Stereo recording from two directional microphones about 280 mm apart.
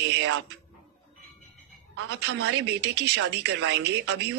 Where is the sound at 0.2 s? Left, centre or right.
Right.